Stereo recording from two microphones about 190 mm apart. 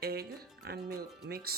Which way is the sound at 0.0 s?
55° right (ahead or behind).